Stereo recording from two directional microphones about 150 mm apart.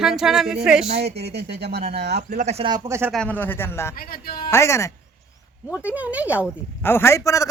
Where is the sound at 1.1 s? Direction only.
90° right.